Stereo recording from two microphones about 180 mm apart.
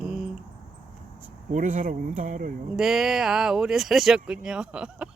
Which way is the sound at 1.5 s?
45° right (ahead or behind).